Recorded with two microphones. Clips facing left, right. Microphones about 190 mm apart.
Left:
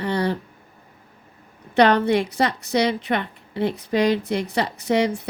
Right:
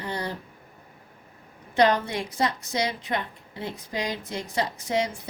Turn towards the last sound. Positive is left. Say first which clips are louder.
# left 7 dB
turn(degrees=65)  # may be behind; listen again after turning